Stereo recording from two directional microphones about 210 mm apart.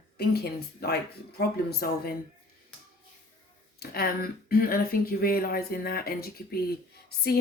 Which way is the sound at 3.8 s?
45° left (ahead or behind).